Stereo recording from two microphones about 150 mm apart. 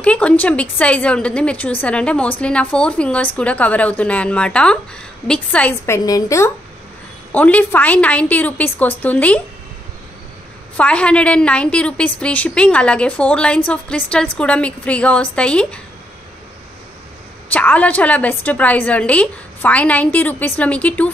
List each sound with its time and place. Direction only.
0.0 s a woman's voice: 10° left (ahead or behind)
5.9 s a woman's voice: 25° left (ahead or behind)
7.3 s a woman's voice: 10° left (ahead or behind)
10.8 s a woman's voice: 5° left (ahead or behind)
17.5 s a woman's voice: 10° left (ahead or behind)